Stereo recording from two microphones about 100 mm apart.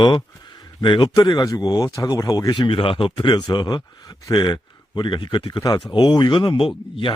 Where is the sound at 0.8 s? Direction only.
50° left (ahead or behind).